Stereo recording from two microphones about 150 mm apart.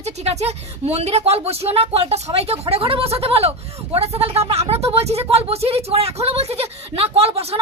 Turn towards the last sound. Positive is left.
turn(degrees=-40)  # may be behind; listen again after turning